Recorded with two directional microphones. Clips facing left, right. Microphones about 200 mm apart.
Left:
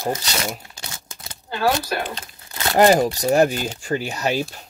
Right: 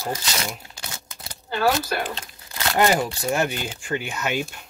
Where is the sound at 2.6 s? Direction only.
35° left (ahead or behind).